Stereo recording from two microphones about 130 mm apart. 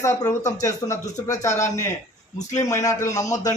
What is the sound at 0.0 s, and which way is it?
A man's voice, 25° left (ahead or behind).